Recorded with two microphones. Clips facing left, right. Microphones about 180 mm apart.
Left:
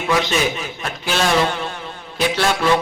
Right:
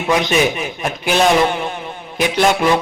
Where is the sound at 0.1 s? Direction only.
15° right (ahead or behind).